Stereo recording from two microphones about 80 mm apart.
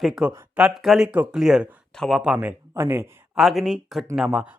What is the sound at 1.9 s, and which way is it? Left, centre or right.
Speech, centre.